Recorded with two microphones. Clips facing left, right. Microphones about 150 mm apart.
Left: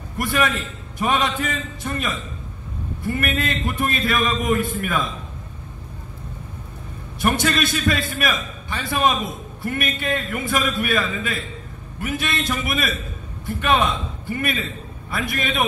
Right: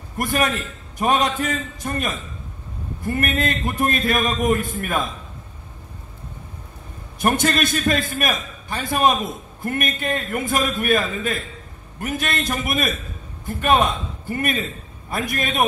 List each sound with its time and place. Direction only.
0.2 s a man's voice: 45° right (ahead or behind)
7.2 s a man's voice: 45° right (ahead or behind)